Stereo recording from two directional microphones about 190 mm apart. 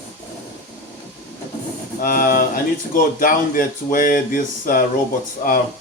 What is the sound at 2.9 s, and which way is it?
Speech, 45° left (ahead or behind).